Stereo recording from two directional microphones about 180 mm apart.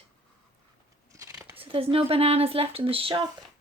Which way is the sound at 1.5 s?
30° right (ahead or behind).